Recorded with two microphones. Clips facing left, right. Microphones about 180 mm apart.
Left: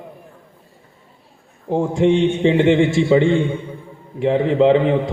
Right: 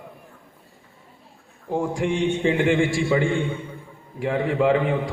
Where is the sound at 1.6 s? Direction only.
25° left (ahead or behind).